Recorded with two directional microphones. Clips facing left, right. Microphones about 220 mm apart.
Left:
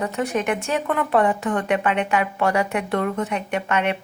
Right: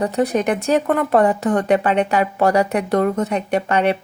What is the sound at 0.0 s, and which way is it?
Speech, 35° right (ahead or behind).